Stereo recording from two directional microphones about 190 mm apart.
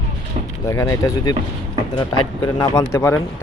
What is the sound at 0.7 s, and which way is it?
Speech, 15° left (ahead or behind).